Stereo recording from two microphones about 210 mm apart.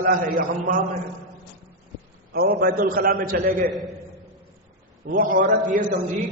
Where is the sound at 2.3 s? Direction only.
45° right (ahead or behind).